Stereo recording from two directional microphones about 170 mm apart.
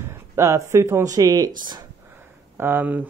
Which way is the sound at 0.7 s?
15° right (ahead or behind).